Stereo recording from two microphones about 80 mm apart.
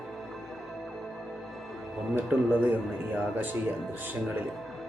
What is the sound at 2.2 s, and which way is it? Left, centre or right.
Speech, right.